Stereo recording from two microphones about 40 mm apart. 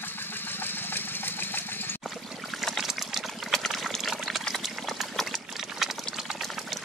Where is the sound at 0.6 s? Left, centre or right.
Left.